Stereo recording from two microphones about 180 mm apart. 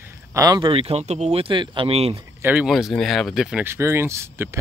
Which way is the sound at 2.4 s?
5° right (ahead or behind).